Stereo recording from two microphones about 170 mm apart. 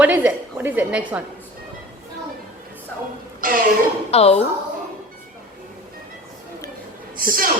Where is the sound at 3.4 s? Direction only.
55° right (ahead or behind).